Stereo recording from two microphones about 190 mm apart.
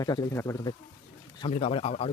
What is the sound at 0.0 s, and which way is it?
Speech, 20° left (ahead or behind).